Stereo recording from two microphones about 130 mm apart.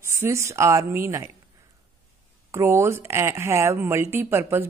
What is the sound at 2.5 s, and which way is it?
Speech, 20° right (ahead or behind).